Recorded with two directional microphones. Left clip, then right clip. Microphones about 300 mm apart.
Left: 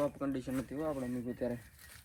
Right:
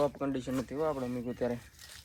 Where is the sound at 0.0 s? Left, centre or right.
Right.